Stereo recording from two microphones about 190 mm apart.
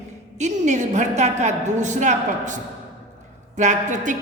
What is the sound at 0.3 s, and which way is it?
A man's voice, 40° right (ahead or behind).